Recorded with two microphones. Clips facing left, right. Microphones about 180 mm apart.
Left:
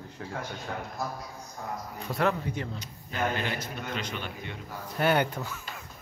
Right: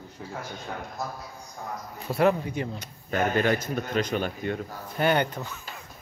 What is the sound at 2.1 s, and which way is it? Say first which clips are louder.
Speech: right 5 dB; 10° right (ahead or behind).